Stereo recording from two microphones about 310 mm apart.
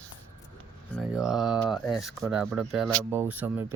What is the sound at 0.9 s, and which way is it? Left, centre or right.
Speech, centre.